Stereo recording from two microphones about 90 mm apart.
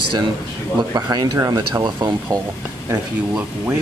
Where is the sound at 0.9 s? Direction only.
40° right (ahead or behind).